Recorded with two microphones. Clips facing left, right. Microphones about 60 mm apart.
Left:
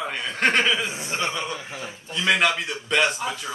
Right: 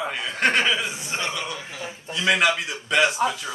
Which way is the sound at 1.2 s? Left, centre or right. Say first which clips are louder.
Left 2 dB; left.